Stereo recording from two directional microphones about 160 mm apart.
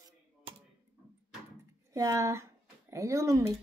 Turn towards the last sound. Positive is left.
turn(degrees=-20)  # may be behind; listen again after turning